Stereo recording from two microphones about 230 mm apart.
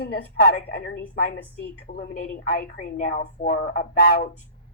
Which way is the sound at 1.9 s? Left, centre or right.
Left.